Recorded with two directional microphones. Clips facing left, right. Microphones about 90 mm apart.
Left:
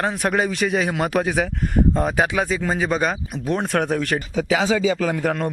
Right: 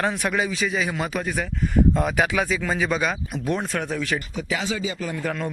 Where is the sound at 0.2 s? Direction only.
45° left (ahead or behind); by 1.5 s 75° left (ahead or behind).